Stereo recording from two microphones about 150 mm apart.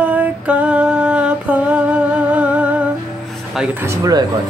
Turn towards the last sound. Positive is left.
turn(degrees=-20)  # may be behind; listen again after turning